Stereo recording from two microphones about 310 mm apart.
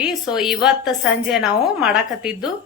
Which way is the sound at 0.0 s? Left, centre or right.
Centre.